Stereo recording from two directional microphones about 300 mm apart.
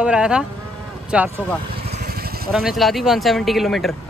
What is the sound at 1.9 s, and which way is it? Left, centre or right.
Vehicle, right.